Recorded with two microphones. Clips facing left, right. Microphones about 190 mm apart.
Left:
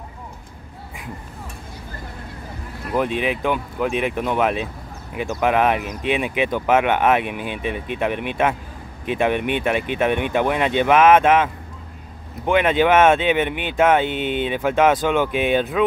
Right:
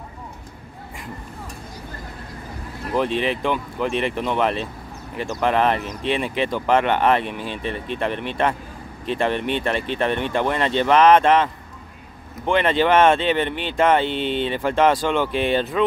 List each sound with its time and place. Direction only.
2.9 s speech: 5° left (ahead or behind)
14.0 s speech: 50° left (ahead or behind)
14.4 s speech: 5° left (ahead or behind)